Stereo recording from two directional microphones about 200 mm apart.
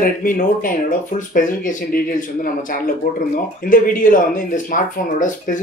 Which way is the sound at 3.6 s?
45° left (ahead or behind).